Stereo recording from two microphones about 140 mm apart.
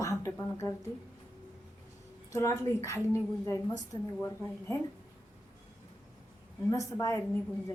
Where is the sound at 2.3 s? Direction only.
20° left (ahead or behind).